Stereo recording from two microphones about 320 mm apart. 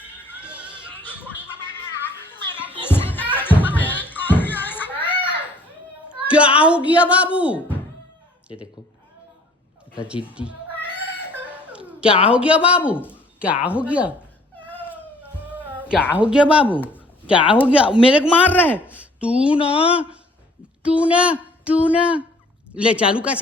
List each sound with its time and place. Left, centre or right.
0.4 s music: centre
2.8 s a sound: centre
6.1 s a sound: centre
6.6 s speech: centre
10.3 s cat: centre
11.7 s a sound: centre
12.0 s speech: centre
12.3 s speech: centre
15.8 s speech: centre
18.9 s a sound: centre
19.5 s speech: centre
20.8 s speech: centre